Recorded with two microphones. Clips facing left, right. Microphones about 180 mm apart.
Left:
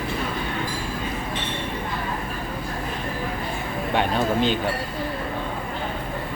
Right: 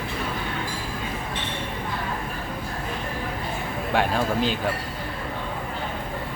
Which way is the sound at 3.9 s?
5° right (ahead or behind).